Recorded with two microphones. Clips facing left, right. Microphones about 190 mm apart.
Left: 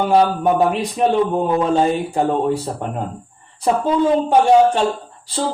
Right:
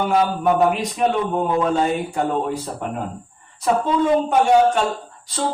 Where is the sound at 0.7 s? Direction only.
30° left (ahead or behind).